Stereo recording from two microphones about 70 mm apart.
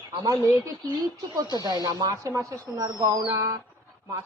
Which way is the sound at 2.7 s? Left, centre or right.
Right.